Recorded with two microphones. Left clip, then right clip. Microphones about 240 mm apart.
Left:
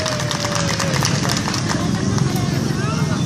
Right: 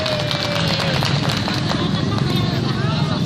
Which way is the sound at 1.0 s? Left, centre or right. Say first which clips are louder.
Even; left.